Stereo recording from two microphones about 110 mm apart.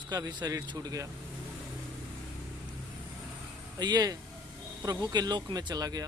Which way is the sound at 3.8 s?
40° right (ahead or behind).